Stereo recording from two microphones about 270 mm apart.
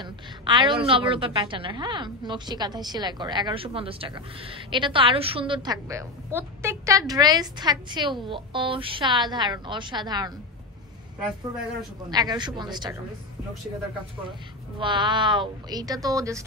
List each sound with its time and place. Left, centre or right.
0.0 s a woman's voice: centre
12.1 s a woman's voice: centre
14.8 s a woman's voice: centre